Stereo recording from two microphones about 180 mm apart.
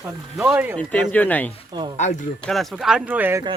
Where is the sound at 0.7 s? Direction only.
5° left (ahead or behind).